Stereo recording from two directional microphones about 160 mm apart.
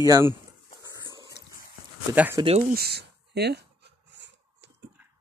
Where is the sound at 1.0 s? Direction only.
25° right (ahead or behind).